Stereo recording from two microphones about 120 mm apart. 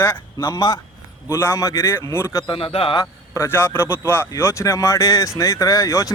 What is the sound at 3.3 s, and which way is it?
Speech, 20° left (ahead or behind).